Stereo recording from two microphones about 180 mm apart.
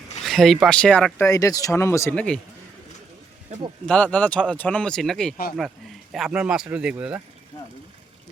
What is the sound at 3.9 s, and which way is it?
Speech, 5° left (ahead or behind).